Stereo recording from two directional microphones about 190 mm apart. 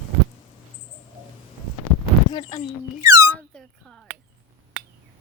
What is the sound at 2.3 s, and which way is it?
Speech, 25° left (ahead or behind).